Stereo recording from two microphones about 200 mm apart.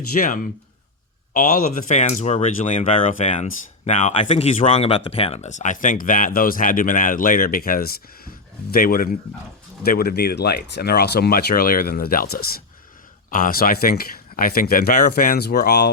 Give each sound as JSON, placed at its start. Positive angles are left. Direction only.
{"t": 0.1, "sound": "speech", "side_deg": 45}